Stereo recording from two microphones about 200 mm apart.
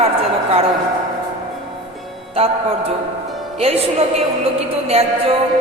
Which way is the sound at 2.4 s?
30° right (ahead or behind).